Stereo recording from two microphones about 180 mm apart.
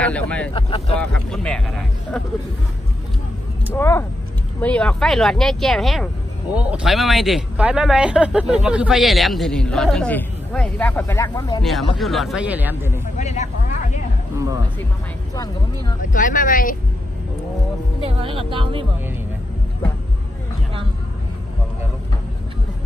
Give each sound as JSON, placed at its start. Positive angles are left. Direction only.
{"t": 0.0, "sound": "speech", "side_deg": 5}
{"t": 0.5, "sound": "speech", "side_deg": 30}
{"t": 1.1, "sound": "speech", "side_deg": 5}
{"t": 3.7, "sound": "speech", "side_deg": 10}
{"t": 12.0, "sound": "speech", "side_deg": 0}
{"t": 13.2, "sound": "speech", "side_deg": 40}
{"t": 15.3, "sound": "speech", "side_deg": 20}
{"t": 16.0, "sound": "speech", "side_deg": 45}
{"t": 18.0, "sound": "speech", "side_deg": -30}